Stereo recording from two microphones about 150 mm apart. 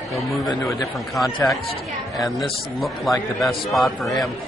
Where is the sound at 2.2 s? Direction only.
Centre (ahead or behind).